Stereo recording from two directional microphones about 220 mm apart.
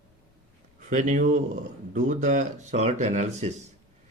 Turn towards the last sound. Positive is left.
turn(degrees=-35)  # may be behind; listen again after turning